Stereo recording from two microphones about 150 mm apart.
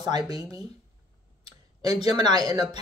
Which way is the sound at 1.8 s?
30° right (ahead or behind).